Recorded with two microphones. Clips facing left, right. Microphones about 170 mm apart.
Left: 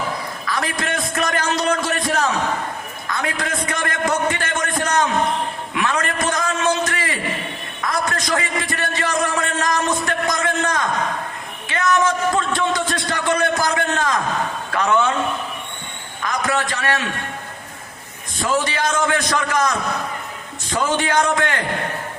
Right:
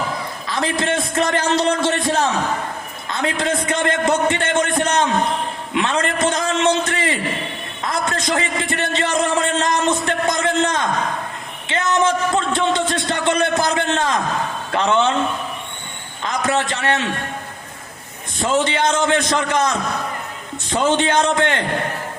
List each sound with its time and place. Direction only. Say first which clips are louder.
0.4 s a man's voice: right 4 dB; 25° right (ahead or behind)
5.7 s a sound: right 3 dB; 25° right (ahead or behind)
14.7 s a man's voice: right 1 dB; 25° right (ahead or behind)
16.2 s a man's voice: right 2 dB; 25° right (ahead or behind)
18.3 s a man's voice: right 2 dB; 25° right (ahead or behind)